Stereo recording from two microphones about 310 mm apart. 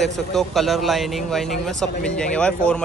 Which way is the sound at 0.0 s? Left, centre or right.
Centre.